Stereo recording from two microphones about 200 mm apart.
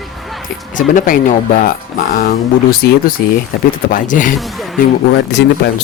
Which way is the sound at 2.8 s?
45° left (ahead or behind).